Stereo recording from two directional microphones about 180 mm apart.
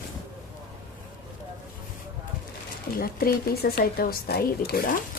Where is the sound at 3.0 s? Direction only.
55° left (ahead or behind).